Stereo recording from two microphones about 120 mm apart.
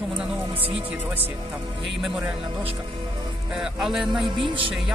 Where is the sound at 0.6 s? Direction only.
50° right (ahead or behind).